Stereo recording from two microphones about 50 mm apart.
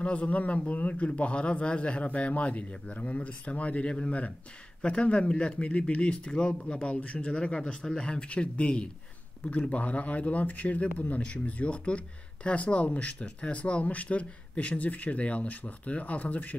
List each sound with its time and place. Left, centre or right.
0.0 s speech: left